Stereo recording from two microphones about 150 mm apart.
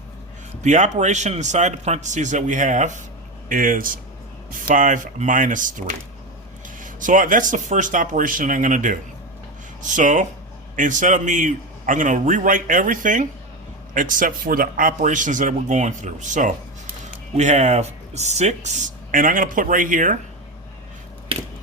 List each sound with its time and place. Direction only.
0.6 s speech: 55° right (ahead or behind)
3.5 s a man's voice: 65° right (ahead or behind)
21.3 s a sound: 35° right (ahead or behind)